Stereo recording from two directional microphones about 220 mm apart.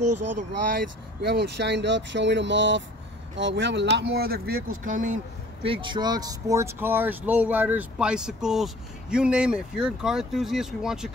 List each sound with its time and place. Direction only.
0.0 s speech: 90° right
1.2 s speech: 45° right (ahead or behind)
5.6 s speech: 25° right (ahead or behind); by 11.1 s centre (ahead or behind)